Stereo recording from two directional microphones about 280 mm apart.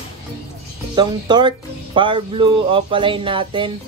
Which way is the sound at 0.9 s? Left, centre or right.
Centre.